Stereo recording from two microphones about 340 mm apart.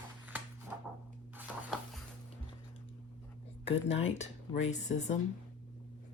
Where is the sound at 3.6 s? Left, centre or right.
Centre.